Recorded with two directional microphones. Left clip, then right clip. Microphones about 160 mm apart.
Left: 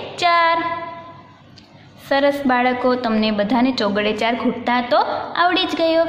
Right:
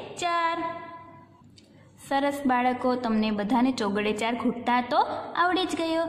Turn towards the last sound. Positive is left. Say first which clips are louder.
# left 10 dB
turn(degrees=-15)  # may be behind; listen again after turning